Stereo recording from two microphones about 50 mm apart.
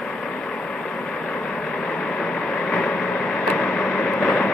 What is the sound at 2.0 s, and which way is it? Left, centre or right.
Vehicle, centre.